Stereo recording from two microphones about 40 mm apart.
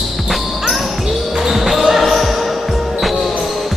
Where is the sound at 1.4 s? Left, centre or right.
Centre.